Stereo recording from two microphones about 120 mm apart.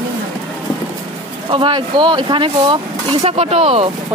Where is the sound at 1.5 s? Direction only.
45° right (ahead or behind).